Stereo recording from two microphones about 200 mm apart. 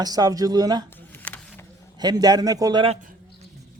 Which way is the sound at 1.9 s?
20° right (ahead or behind).